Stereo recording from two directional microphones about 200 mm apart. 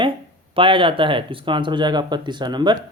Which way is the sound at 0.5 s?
25° right (ahead or behind).